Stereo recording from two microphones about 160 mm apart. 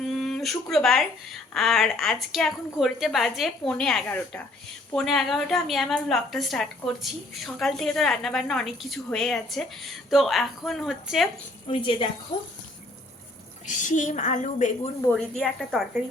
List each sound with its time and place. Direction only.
0.0 s a woman's voice: centre (ahead or behind)
11.7 s a woman's voice: 30° left (ahead or behind)
13.7 s a woman's voice: 50° left (ahead or behind)
15.4 s a woman's voice: centre (ahead or behind)